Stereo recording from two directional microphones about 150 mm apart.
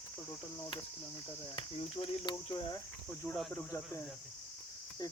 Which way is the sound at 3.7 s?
20° left (ahead or behind).